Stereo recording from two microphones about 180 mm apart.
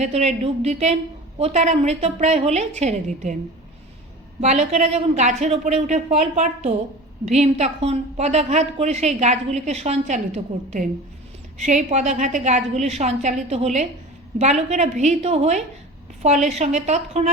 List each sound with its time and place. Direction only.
0.0 s a woman's voice: 35° right (ahead or behind)
4.4 s a woman's voice: 40° right (ahead or behind)